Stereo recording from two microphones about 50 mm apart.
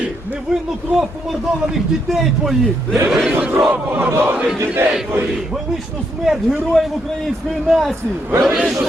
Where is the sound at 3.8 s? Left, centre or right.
Right.